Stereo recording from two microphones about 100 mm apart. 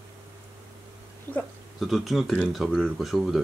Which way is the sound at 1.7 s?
Centre (ahead or behind).